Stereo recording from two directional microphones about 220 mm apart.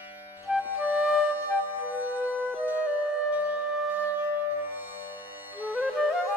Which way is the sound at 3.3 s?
5° right (ahead or behind).